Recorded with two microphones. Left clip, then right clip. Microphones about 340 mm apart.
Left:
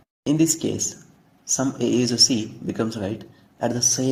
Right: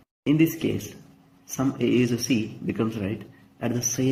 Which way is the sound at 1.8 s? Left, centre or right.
Left.